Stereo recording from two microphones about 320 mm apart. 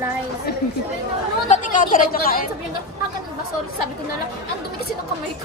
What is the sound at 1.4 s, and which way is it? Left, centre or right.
Speech, left.